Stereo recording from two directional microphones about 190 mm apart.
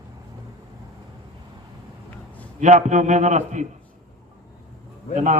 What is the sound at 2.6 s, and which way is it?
A man's voice, 40° right (ahead or behind).